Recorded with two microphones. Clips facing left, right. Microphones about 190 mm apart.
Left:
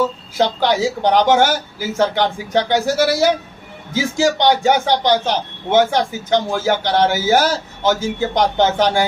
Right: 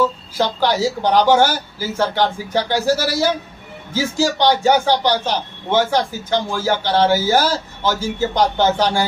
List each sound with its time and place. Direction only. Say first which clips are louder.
0.3 s a man's voice: left 2 dB; 20° left (ahead or behind)